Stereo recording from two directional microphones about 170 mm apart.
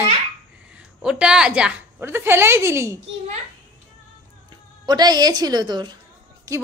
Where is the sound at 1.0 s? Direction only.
5° right (ahead or behind).